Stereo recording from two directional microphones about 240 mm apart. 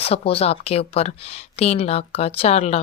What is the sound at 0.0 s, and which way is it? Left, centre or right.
A woman's voice, left.